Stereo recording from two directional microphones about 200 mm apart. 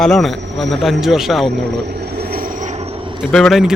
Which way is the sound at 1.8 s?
55° right (ahead or behind).